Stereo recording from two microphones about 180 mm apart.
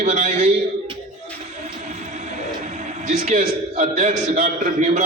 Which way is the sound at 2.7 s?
40° right (ahead or behind).